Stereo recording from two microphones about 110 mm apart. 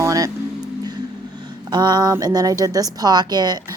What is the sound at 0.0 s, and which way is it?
Music, 30° right (ahead or behind).